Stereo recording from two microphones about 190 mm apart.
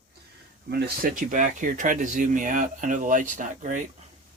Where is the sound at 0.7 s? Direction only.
55° right (ahead or behind).